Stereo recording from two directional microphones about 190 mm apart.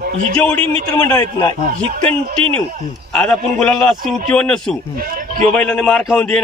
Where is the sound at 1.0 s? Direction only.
20° left (ahead or behind).